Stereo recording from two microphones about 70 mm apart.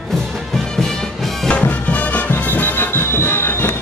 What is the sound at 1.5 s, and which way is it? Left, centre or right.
Music, left.